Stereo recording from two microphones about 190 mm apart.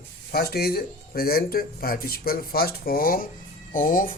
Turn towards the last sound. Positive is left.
turn(degrees=45)  # may be behind; listen again after turning